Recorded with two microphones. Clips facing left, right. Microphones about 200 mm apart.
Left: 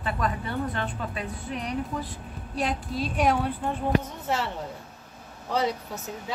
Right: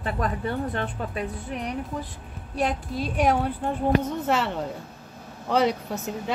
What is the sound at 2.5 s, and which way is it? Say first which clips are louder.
Speech: right 2 dB; 50° right (ahead or behind).